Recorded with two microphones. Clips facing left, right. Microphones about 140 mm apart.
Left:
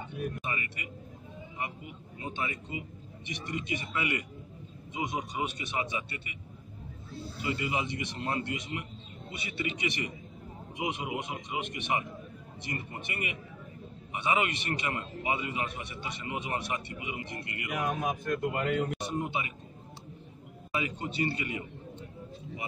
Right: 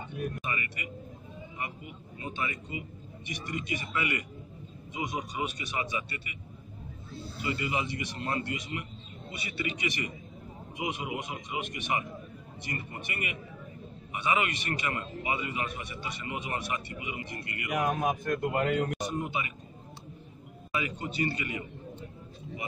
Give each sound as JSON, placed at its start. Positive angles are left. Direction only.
{"t": 0.4, "sound": "speech", "side_deg": 25}
{"t": 2.1, "sound": "a man's voice", "side_deg": 25}
{"t": 7.4, "sound": "a man's voice", "side_deg": 15}
{"t": 17.6, "sound": "speech", "side_deg": -50}
{"t": 19.0, "sound": "a man's voice", "side_deg": 25}
{"t": 20.7, "sound": "a man's voice", "side_deg": 25}